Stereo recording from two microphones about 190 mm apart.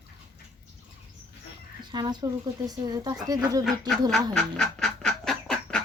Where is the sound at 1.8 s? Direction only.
20° right (ahead or behind).